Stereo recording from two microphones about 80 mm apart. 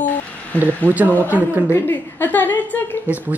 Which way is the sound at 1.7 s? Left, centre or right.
Left.